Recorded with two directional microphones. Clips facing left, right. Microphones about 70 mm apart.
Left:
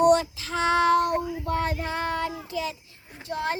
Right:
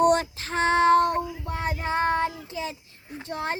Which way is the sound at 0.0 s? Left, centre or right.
Right.